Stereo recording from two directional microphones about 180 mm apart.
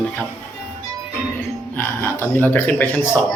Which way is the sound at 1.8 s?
10° left (ahead or behind).